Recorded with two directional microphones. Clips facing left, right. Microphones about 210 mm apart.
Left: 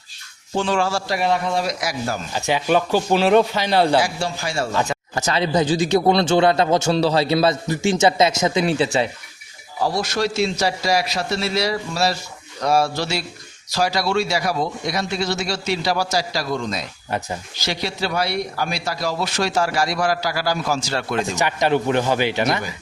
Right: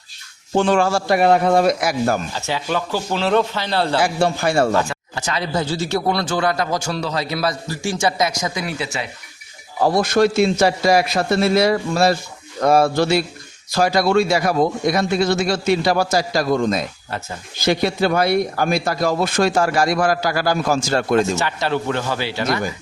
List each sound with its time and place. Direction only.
0.5 s a man's voice: 55° right (ahead or behind)
2.3 s a man's voice: 15° left (ahead or behind)
4.0 s a man's voice: 55° right (ahead or behind)
5.1 s speech: 40° left (ahead or behind)
5.4 s a man's voice: 15° left (ahead or behind)
9.8 s a man's voice: 55° right (ahead or behind)
21.3 s a man's voice: 15° left (ahead or behind)